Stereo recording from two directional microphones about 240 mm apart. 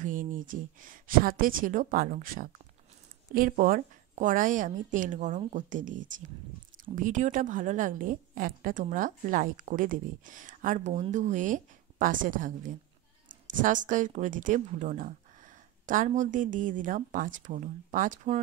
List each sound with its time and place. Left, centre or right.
0.0 s a woman's voice: right